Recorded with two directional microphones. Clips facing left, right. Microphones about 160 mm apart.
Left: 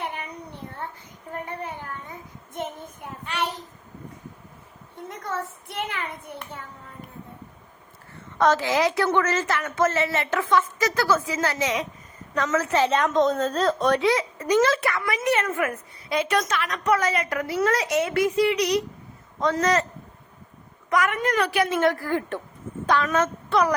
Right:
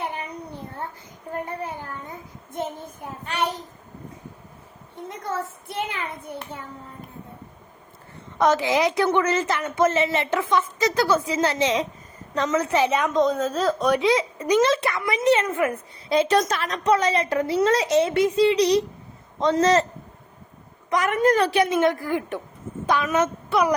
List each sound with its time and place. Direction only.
0.0 s a sound: 35° right (ahead or behind)
1.3 s a child's voice: 35° right (ahead or behind)
8.4 s a woman's voice: 15° right (ahead or behind)
13.1 s speech: centre (ahead or behind)
13.9 s a woman's voice: 20° right (ahead or behind)
20.9 s a woman's voice: 30° right (ahead or behind); by 23.7 s 10° right (ahead or behind)